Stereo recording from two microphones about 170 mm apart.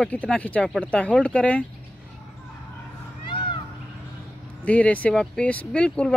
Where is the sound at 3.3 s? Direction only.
30° left (ahead or behind).